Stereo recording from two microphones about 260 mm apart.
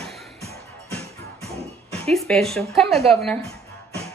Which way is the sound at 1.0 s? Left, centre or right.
Right.